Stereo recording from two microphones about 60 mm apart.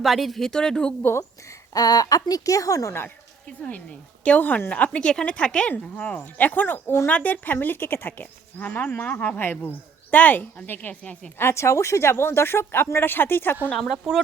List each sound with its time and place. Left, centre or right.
0.0 s speech: centre
1.7 s speech: left
3.7 s a woman's voice: left
11.0 s a woman's voice: centre
11.3 s speech: left
13.7 s speech: centre